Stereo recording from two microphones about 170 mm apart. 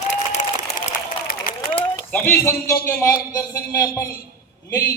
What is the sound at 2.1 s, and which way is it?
A man's voice, 10° left (ahead or behind).